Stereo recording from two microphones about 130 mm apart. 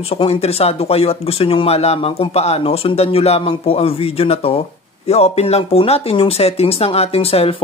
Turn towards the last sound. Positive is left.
turn(degrees=50)  # may be behind; listen again after turning